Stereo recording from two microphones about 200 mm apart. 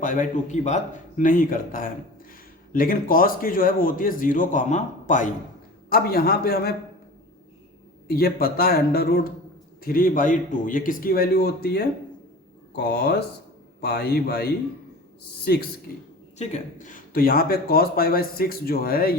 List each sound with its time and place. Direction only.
0.0 s a man's voice: 40° left (ahead or behind)
5.9 s a man's voice: 50° left (ahead or behind)
8.0 s a man's voice: 50° left (ahead or behind)
16.4 s a man's voice: 35° left (ahead or behind)